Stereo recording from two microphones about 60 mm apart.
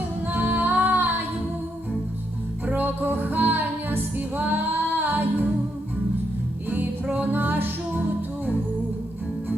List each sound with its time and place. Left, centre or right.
0.3 s music: right
2.6 s music: right
6.7 s music: right